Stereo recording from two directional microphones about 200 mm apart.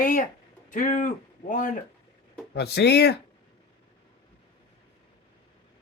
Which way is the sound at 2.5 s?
55° left (ahead or behind).